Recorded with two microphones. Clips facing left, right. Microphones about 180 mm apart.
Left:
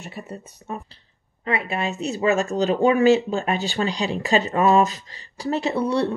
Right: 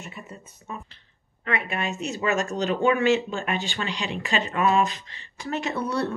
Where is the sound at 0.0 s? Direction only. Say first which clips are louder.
Left 5 dB; 40° left (ahead or behind).